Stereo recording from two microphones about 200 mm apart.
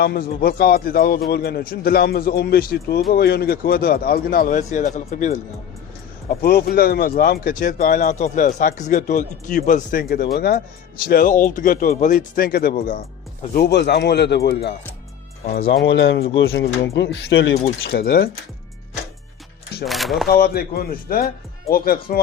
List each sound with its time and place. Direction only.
0.0 s speech: 50° left (ahead or behind)
6.4 s speech: 50° left (ahead or behind); by 16.2 s 65° left (ahead or behind)
16.5 s speech: 50° left (ahead or behind)
17.0 s speech: 60° left (ahead or behind)
19.8 s speech: centre (ahead or behind)
20.2 s speech: 50° left (ahead or behind)